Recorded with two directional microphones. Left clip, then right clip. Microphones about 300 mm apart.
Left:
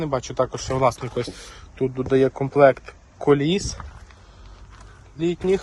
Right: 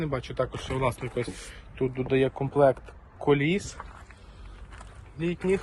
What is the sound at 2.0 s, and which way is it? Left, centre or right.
Speech, left.